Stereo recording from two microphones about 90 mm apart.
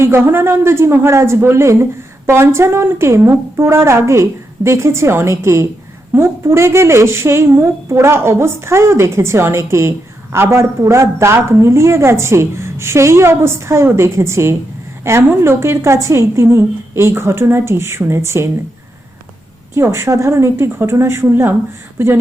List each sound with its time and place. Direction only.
0.0 s speech: 25° right (ahead or behind)
19.7 s speech: 30° right (ahead or behind)